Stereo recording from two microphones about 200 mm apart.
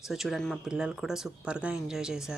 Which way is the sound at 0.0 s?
Centre (ahead or behind).